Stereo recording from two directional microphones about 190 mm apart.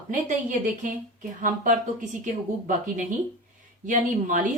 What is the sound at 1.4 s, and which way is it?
A woman's voice, 40° right (ahead or behind).